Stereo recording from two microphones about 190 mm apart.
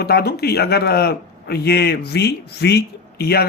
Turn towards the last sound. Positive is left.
turn(degrees=55)  # may be behind; listen again after turning